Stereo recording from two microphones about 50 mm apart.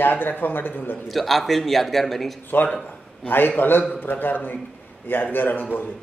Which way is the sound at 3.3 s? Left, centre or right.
Left.